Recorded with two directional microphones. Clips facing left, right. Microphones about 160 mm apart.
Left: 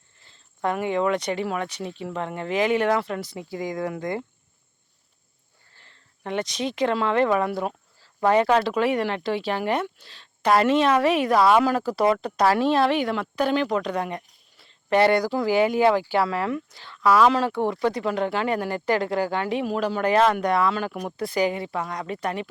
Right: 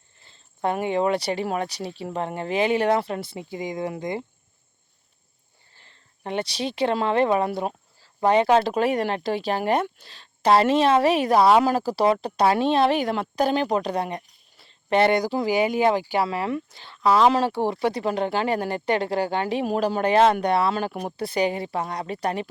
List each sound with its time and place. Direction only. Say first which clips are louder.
0.2 s speech: right 1 dB; 25° right (ahead or behind)
3.3 s speech: left 1 dB; 20° right (ahead or behind)
5.7 s speech: even; 20° right (ahead or behind)
8.6 s speech: even; 45° right (ahead or behind); by 12.9 s 25° right (ahead or behind)
12.9 s speech: right 1 dB; 40° right (ahead or behind); by 16.5 s 15° right (ahead or behind)
16.5 s speech: right 1 dB; 25° right (ahead or behind)
19.6 s speech: right 1 dB; 40° right (ahead or behind)